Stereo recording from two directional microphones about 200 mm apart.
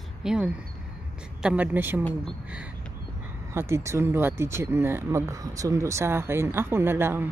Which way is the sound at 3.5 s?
15° right (ahead or behind).